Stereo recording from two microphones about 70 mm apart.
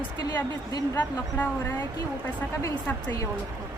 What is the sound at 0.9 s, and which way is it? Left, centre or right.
Speech, left.